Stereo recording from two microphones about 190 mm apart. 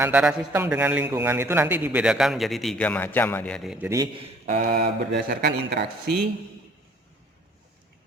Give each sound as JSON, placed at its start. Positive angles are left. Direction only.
{"t": 0.0, "sound": "a man's voice", "side_deg": -5}
{"t": 3.8, "sound": "speech", "side_deg": -15}
{"t": 4.4, "sound": "speech", "side_deg": -50}